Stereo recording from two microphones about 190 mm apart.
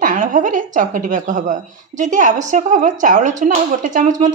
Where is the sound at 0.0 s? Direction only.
45° right (ahead or behind).